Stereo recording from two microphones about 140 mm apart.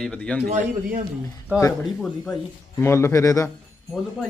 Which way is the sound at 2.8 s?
20° left (ahead or behind).